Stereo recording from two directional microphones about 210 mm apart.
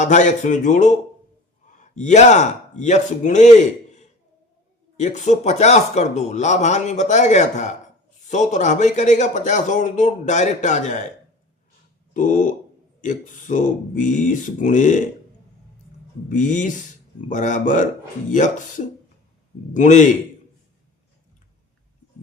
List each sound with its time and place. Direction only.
0.0 s a man's voice: 35° left (ahead or behind)
4.9 s a man's voice: 35° left (ahead or behind)
12.1 s a man's voice: 40° left (ahead or behind)
16.3 s a man's voice: 35° left (ahead or behind)